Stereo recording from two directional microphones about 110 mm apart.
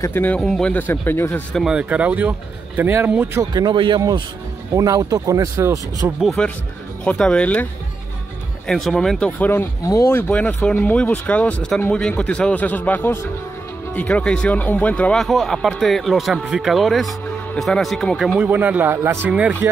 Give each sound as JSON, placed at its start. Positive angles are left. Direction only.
{"t": 0.0, "sound": "speech", "side_deg": 20}
{"t": 0.4, "sound": "speech", "side_deg": 5}
{"t": 0.7, "sound": "speech", "side_deg": 20}
{"t": 1.7, "sound": "speech", "side_deg": -10}
{"t": 3.5, "sound": "speech", "side_deg": -45}
{"t": 4.7, "sound": "speech", "side_deg": -35}
{"t": 6.4, "sound": "speech", "side_deg": 5}
{"t": 8.6, "sound": "speech", "side_deg": 0}
{"t": 9.4, "sound": "speech", "side_deg": 20}
{"t": 9.8, "sound": "speech", "side_deg": 30}
{"t": 10.3, "sound": "speech", "side_deg": 10}
{"t": 15.2, "sound": "speech", "side_deg": 0}
{"t": 18.4, "sound": "speech", "side_deg": -15}